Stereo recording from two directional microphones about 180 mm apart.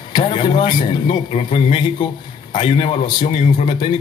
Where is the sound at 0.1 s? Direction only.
25° left (ahead or behind).